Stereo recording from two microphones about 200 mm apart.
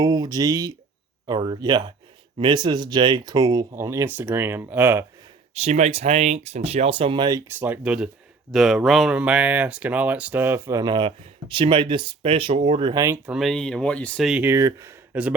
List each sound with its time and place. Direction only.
0.0 s speech: 20° right (ahead or behind)
5.5 s speech: 35° right (ahead or behind)
7.6 s speech: 5° right (ahead or behind)
13.2 s speech: centre (ahead or behind)